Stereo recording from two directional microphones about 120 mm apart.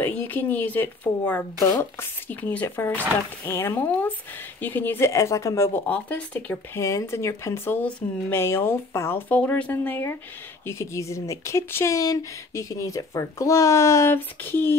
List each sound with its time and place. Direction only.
0.0 s speech: 15° left (ahead or behind)
5.9 s speech: 10° left (ahead or behind)
6.8 s speech: 25° left (ahead or behind)